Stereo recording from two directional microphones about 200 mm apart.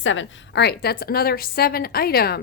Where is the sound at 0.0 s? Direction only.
70° left (ahead or behind).